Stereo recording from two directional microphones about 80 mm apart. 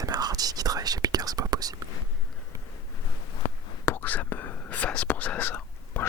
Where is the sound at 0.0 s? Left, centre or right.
Right.